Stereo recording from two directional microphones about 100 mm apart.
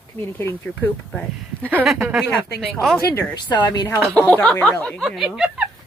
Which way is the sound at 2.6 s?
Centre (ahead or behind).